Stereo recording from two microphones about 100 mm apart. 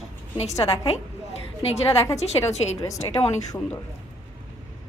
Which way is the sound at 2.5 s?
90° left.